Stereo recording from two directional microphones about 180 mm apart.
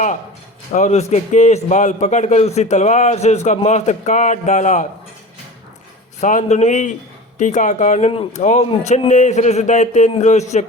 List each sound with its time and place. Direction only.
0.7 s a man's voice: 40° left (ahead or behind)
6.1 s a man's voice: 40° left (ahead or behind)